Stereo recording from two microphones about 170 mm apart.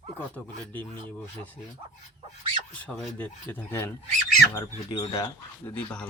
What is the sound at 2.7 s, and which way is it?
Speech, 5° left (ahead or behind).